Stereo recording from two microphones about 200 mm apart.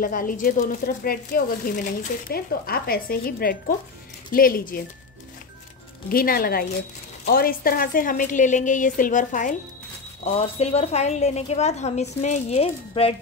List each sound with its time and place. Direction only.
0.0 s speech: 45° left (ahead or behind)
6.0 s a woman's voice: 45° left (ahead or behind)
10.2 s a woman's voice: 30° left (ahead or behind)